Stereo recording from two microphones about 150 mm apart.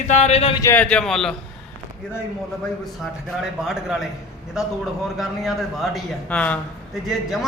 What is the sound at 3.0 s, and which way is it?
A man's voice, centre (ahead or behind).